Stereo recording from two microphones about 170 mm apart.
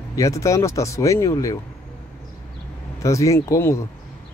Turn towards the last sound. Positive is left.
turn(degrees=15)  # may be behind; listen again after turning